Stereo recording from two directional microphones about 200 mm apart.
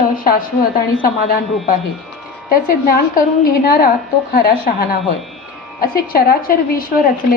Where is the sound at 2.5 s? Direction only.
45° left (ahead or behind).